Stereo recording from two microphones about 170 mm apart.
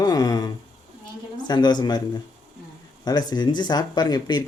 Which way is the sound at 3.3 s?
25° left (ahead or behind).